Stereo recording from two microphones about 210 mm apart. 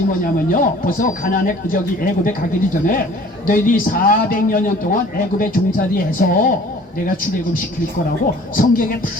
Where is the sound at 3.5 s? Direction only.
40° left (ahead or behind).